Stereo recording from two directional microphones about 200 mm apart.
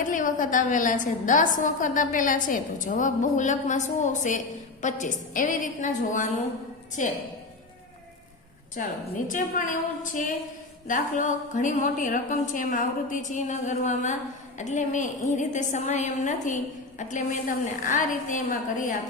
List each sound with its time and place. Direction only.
0.0 s a woman's voice: 40° left (ahead or behind)
8.7 s a woman's voice: 40° left (ahead or behind)